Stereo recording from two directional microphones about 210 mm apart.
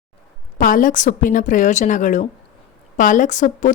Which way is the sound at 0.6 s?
40° left (ahead or behind).